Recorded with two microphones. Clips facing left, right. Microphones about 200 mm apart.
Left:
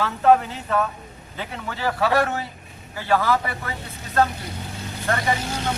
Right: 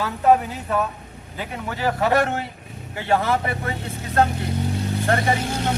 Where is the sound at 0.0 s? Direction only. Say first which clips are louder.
Even; 15° right (ahead or behind).